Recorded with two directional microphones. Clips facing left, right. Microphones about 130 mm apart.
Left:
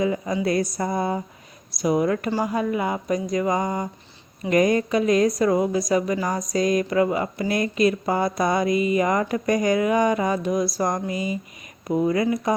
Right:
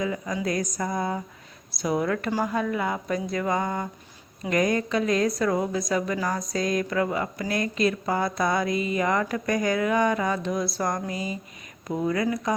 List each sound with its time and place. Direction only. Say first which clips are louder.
0.0 s speech: left 5 dB; 25° left (ahead or behind)
1.8 s a woman's voice: left 4 dB; 15° left (ahead or behind)